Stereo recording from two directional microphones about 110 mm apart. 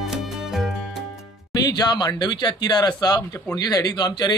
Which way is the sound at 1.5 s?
35° left (ahead or behind).